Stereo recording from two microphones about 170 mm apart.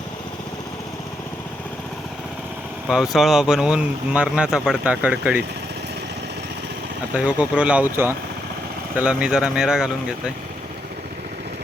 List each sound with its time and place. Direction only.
2.9 s speech: centre (ahead or behind)
7.1 s speech: 10° right (ahead or behind)